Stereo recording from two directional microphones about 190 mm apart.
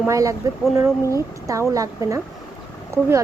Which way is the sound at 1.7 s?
15° right (ahead or behind).